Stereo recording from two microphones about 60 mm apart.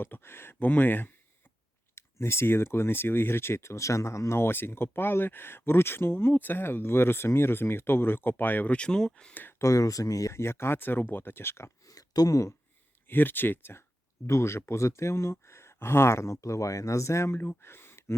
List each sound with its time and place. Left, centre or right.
0.0 s speech: left
2.0 s speech: left
8.7 s speech: centre
9.3 s speech: left
9.6 s speech: left
10.3 s speech: left
11.9 s a sound: left
13.1 s speech: left
14.3 s speech: left
17.6 s gasp: left